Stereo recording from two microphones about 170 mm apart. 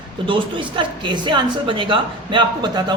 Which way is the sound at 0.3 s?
30° right (ahead or behind).